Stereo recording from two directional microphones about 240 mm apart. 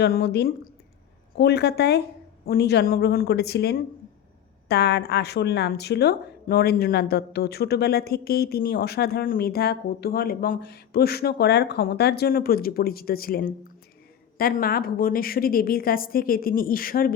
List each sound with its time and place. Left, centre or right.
0.0 s a woman's voice: left